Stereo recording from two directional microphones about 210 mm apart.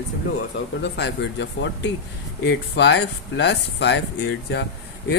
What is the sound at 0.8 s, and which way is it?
A man's voice, 55° left (ahead or behind).